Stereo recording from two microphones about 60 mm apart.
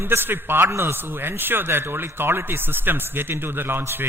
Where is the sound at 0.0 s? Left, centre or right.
Right.